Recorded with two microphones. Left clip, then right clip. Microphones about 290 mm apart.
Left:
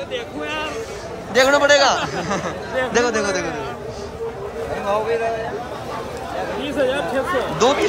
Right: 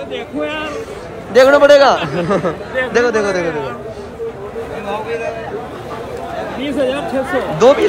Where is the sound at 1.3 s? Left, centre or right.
Centre.